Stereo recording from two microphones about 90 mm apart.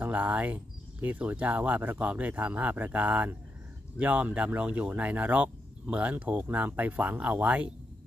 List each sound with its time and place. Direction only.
0.0 s speech: 15° right (ahead or behind)